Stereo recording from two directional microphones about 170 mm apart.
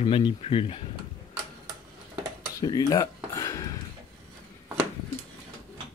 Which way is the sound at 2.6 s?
20° left (ahead or behind).